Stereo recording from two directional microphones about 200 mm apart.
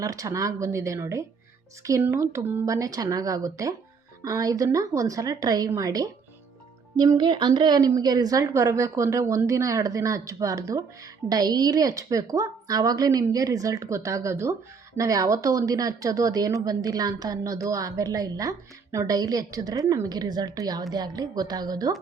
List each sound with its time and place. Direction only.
0.0 s a woman's voice: 15° right (ahead or behind)